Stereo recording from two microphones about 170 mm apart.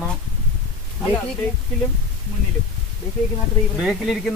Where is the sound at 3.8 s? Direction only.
5° right (ahead or behind).